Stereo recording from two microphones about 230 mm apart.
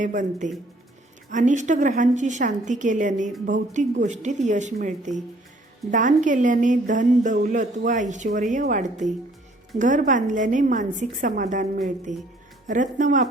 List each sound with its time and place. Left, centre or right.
0.0 s a woman's voice: right